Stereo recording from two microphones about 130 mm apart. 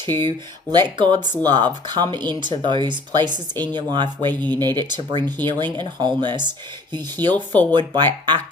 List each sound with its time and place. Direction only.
0.1 s speech: 20° left (ahead or behind)
0.7 s speech: 35° right (ahead or behind)
7.3 s speech: 15° left (ahead or behind)
7.7 s speech: 35° right (ahead or behind)